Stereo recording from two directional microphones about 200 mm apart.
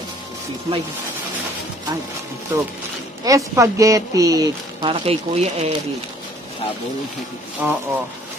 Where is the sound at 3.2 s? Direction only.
15° right (ahead or behind); by 5.7 s 30° right (ahead or behind).